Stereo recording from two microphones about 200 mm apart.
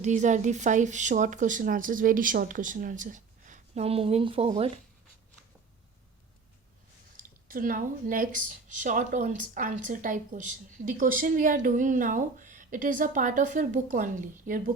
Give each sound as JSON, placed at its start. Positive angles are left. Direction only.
{"t": 0.0, "sound": "speech", "side_deg": -35}
{"t": 7.2, "sound": "speech", "side_deg": -45}